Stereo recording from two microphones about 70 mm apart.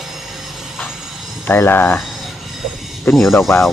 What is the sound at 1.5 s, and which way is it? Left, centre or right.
Speech, left.